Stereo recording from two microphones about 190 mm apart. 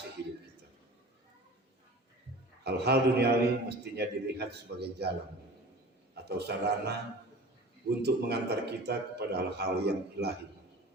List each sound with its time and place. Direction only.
2.6 s a man's voice: 60° right (ahead or behind)
6.1 s a man's voice: 60° right (ahead or behind)
8.0 s a man's voice: 60° right (ahead or behind)